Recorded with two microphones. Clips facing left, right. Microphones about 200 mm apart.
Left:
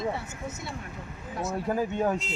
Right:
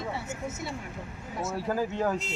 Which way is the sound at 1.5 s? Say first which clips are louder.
Left 1 dB; 20° left (ahead or behind).